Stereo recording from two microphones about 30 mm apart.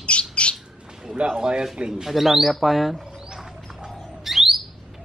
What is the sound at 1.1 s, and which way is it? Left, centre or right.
Speech, right.